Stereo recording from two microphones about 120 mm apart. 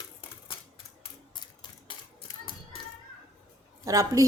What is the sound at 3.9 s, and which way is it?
Speech, 30° right (ahead or behind).